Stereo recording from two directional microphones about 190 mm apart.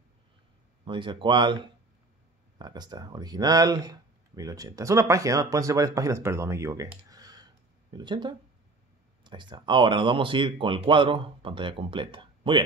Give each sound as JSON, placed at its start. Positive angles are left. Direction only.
{"t": 0.8, "sound": "speech", "side_deg": -25}
{"t": 6.9, "sound": "a sound", "side_deg": -20}
{"t": 9.2, "sound": "speech", "side_deg": -25}